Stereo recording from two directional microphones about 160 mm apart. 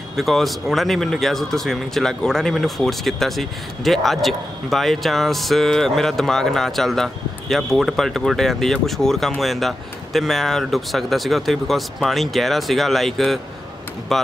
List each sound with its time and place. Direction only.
0.1 s speech: centre (ahead or behind)